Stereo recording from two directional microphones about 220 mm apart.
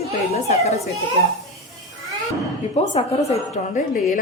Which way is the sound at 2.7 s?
30° left (ahead or behind).